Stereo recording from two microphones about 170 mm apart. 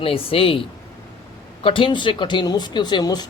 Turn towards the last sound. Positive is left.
turn(degrees=25)  # may be behind; listen again after turning